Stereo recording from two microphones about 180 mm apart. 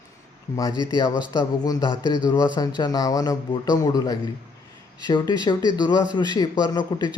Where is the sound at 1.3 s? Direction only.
20° left (ahead or behind).